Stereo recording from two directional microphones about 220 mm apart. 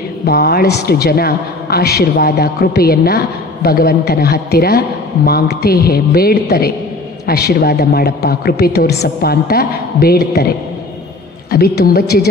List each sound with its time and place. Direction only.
0.2 s speech: 45° left (ahead or behind)
11.5 s speech: 45° left (ahead or behind)